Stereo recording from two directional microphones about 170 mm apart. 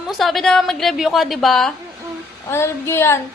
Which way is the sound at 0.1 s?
Centre (ahead or behind).